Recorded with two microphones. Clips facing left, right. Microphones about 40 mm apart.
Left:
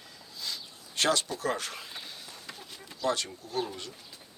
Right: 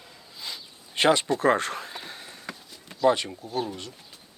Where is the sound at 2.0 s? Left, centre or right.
Right.